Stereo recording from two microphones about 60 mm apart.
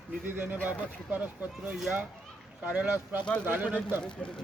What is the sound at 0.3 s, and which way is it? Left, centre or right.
Speech, right.